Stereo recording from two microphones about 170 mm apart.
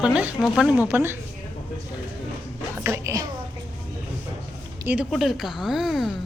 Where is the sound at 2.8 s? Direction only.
15° right (ahead or behind).